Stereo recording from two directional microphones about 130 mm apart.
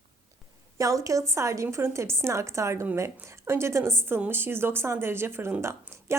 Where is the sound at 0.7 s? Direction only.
25° right (ahead or behind).